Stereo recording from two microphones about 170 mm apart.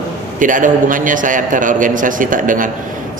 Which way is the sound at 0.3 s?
50° right (ahead or behind).